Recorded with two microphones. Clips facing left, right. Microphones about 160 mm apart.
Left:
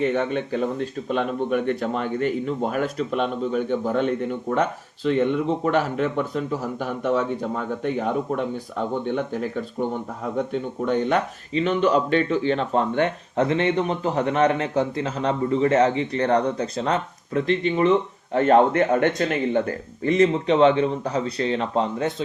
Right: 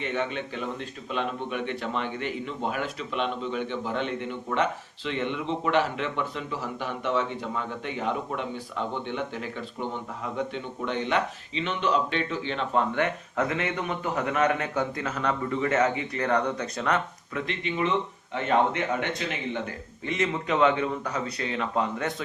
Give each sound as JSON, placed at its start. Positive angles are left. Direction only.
{"t": 0.0, "sound": "speech", "side_deg": 45}
{"t": 18.3, "sound": "speech", "side_deg": 50}
{"t": 20.1, "sound": "speech", "side_deg": 35}